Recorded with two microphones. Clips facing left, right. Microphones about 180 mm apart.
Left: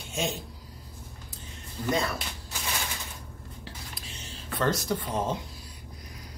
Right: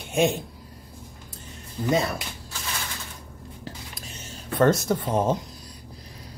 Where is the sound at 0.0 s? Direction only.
60° right (ahead or behind).